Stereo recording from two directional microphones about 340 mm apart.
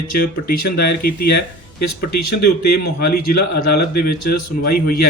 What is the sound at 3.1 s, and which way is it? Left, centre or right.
Speech, left.